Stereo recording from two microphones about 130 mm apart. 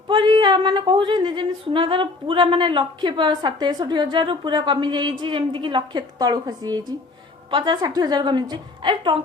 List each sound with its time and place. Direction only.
0.1 s a woman's voice: 35° right (ahead or behind)